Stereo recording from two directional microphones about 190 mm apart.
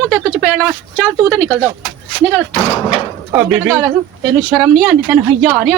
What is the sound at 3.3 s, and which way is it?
Speech, 10° right (ahead or behind).